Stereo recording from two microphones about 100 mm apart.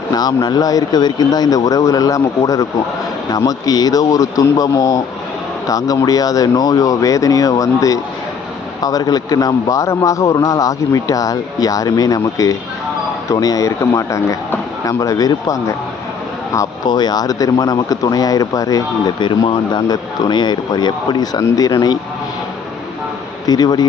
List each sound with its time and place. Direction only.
0.1 s a man's voice: 40° left (ahead or behind)
16.6 s a man's voice: 45° left (ahead or behind)
23.5 s speech: 40° left (ahead or behind)